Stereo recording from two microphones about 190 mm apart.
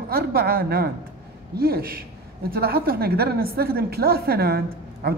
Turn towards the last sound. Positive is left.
turn(degrees=-55)  # may be behind; listen again after turning